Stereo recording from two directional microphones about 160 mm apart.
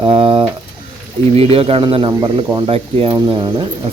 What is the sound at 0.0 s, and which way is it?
Pigeon, 35° right (ahead or behind).